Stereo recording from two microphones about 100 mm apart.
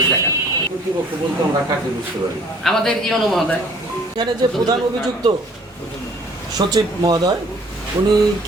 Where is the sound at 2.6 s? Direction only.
5° left (ahead or behind).